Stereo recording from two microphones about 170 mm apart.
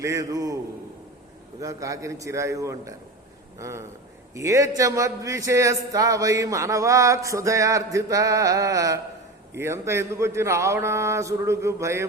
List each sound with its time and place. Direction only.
0.0 s a man's voice: 20° right (ahead or behind)
1.6 s a man's voice: 20° right (ahead or behind)